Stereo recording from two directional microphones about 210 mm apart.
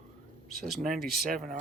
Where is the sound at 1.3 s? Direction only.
40° right (ahead or behind).